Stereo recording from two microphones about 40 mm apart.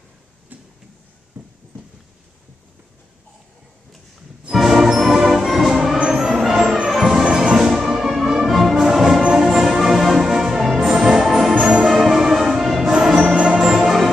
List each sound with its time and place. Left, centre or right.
4.5 s music: centre
8.7 s orchestra: centre
9.4 s music: centre